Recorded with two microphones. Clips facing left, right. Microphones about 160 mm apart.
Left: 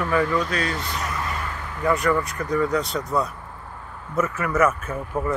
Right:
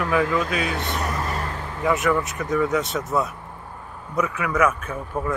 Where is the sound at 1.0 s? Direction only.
35° right (ahead or behind).